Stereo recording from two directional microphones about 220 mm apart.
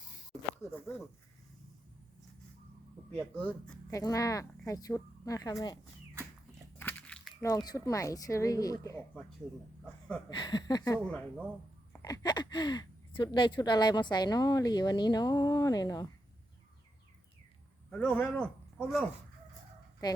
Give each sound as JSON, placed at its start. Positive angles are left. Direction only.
{"t": 0.6, "sound": "speech", "side_deg": 10}
{"t": 3.1, "sound": "speech", "side_deg": 5}
{"t": 6.7, "sound": "a sound", "side_deg": 5}
{"t": 7.4, "sound": "speech", "side_deg": 15}
{"t": 10.2, "sound": "speech", "side_deg": 20}
{"t": 12.0, "sound": "speech", "side_deg": 20}
{"t": 17.9, "sound": "speech", "side_deg": 5}